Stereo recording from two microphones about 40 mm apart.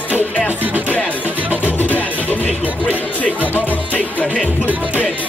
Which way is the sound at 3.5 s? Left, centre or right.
Left.